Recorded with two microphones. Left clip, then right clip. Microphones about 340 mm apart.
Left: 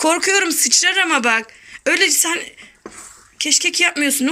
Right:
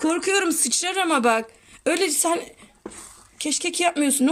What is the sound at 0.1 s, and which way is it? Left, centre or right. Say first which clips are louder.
Speech: left 5 dB; centre.